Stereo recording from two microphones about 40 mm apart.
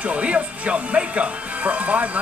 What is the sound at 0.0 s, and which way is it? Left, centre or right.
Speech, right.